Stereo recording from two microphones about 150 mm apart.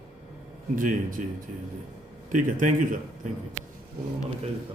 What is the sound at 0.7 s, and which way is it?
Speech, 60° right (ahead or behind).